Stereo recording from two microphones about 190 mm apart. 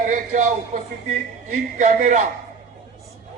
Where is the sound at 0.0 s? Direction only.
45° right (ahead or behind).